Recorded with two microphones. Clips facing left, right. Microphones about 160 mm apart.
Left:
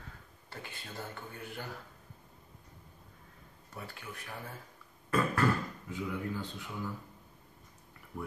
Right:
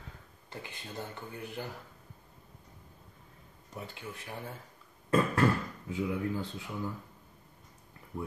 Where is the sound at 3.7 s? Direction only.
25° right (ahead or behind).